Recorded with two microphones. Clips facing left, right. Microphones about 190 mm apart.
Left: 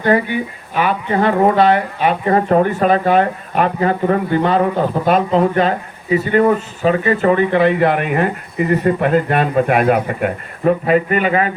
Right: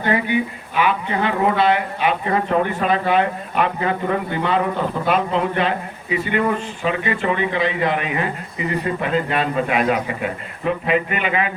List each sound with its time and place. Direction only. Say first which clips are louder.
0.8 s speech: left 3 dB; 45° left (ahead or behind)